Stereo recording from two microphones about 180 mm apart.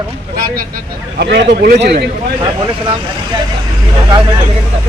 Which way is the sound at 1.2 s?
70° right (ahead or behind).